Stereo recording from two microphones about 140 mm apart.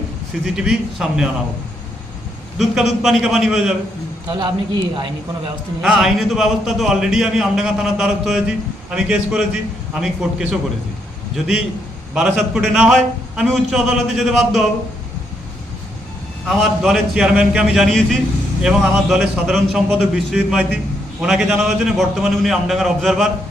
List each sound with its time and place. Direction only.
0.4 s speech: 5° right (ahead or behind)
2.6 s speech: 5° right (ahead or behind)
4.3 s speech: 35° right (ahead or behind)
5.8 s speech: centre (ahead or behind)
12.1 s speech: 5° right (ahead or behind)
16.5 s speech: centre (ahead or behind)